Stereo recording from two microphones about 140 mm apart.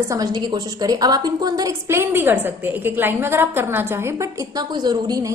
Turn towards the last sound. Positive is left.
turn(degrees=-30)  # may be behind; listen again after turning